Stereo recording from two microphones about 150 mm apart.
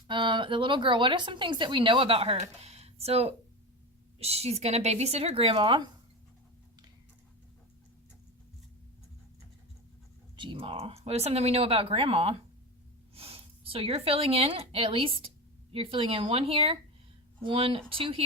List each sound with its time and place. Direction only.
0.1 s speech: 35° right (ahead or behind)
10.3 s speech: 35° right (ahead or behind)